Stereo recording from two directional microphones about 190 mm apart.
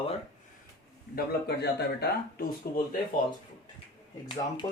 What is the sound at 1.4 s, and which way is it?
Speech, 60° left (ahead or behind).